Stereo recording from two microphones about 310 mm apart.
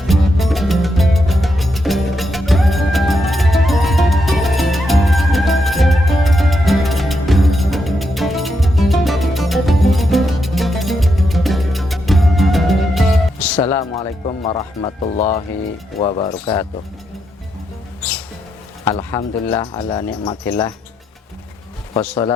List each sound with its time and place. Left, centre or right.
0.0 s music: centre
13.6 s speech: centre
18.9 s speech: centre
21.9 s speech: centre